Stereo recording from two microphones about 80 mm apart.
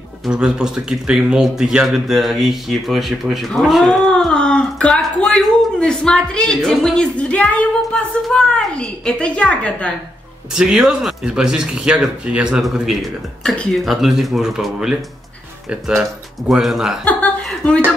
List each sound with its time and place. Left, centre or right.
0.3 s speech: centre
10.5 s speech: centre
16.0 s speech: centre
17.0 s speech: left